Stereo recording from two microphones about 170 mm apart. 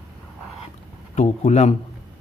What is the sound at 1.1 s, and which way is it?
Speech, 40° left (ahead or behind).